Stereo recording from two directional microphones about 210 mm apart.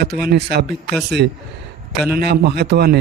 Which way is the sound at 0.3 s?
50° right (ahead or behind).